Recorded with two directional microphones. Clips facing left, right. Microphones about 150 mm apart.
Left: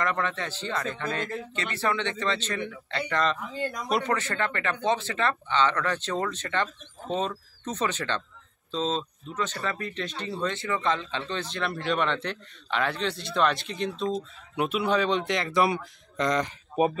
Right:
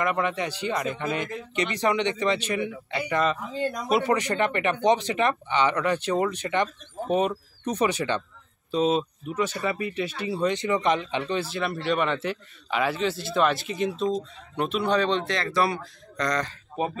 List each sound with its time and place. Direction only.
0.0 s speech: 10° right (ahead or behind)
3.4 s speech: 20° right (ahead or behind)
14.1 s speech: 5° left (ahead or behind)